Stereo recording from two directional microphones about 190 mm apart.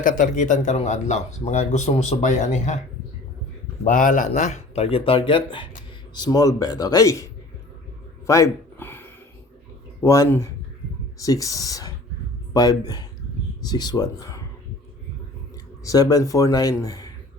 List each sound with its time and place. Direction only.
0.0 s speech: 45° left (ahead or behind)
3.8 s speech: 45° left (ahead or behind); by 7.3 s 20° left (ahead or behind)
8.3 s a sound: 15° left (ahead or behind)
10.0 s speech: 15° left (ahead or behind)
15.8 s speech: 20° left (ahead or behind)